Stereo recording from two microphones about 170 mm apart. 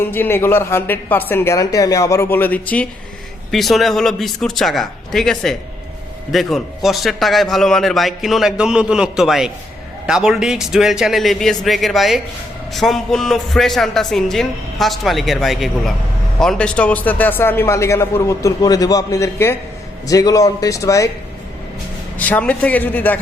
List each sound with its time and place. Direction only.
0.0 s a man's voice: 15° left (ahead or behind)
22.2 s a man's voice: 10° left (ahead or behind)